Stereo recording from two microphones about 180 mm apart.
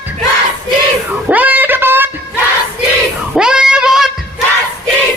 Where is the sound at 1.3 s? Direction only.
10° right (ahead or behind).